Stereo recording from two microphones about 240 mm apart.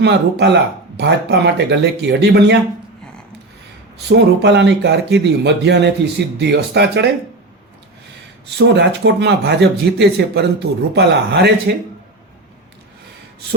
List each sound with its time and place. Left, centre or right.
0.0 s speech: right
4.1 s speech: right
8.5 s speech: right